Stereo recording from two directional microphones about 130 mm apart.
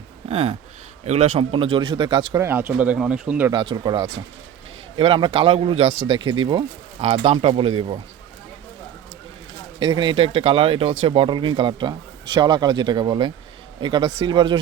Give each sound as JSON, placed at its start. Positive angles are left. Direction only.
{"t": 0.3, "sound": "speech", "side_deg": -50}
{"t": 2.4, "sound": "speech", "side_deg": -15}
{"t": 3.5, "sound": "speech", "side_deg": -35}
{"t": 7.0, "sound": "speech", "side_deg": -55}
{"t": 9.8, "sound": "speech", "side_deg": -35}